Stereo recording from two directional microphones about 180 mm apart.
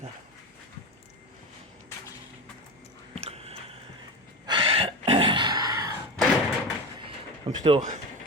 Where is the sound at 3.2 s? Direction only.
35° right (ahead or behind).